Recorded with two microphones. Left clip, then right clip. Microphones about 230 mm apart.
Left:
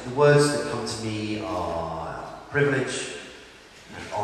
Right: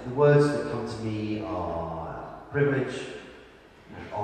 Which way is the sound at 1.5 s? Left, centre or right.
Right.